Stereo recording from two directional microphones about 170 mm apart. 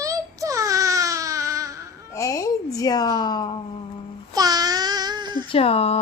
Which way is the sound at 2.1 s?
20° left (ahead or behind).